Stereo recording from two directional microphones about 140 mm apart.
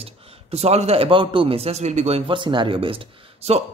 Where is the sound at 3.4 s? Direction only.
50° right (ahead or behind).